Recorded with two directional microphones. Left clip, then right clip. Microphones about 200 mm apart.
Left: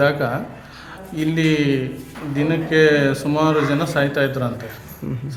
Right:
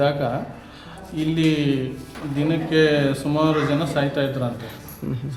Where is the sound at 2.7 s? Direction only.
15° left (ahead or behind).